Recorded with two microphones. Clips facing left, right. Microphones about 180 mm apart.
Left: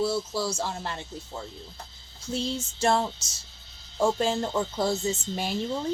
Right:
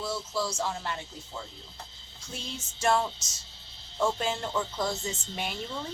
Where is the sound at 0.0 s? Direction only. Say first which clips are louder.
Left 5 dB; 30° left (ahead or behind).